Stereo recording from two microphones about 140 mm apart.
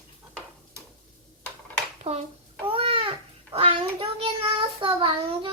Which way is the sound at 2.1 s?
45° right (ahead or behind).